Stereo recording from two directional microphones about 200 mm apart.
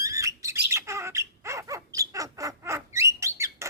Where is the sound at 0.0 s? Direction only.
15° right (ahead or behind).